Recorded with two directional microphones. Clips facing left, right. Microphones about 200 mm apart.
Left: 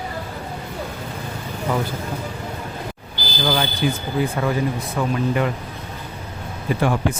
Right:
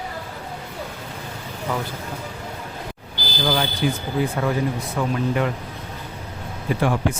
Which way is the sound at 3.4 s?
Centre (ahead or behind).